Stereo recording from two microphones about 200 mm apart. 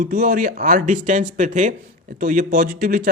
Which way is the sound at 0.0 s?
45° right (ahead or behind).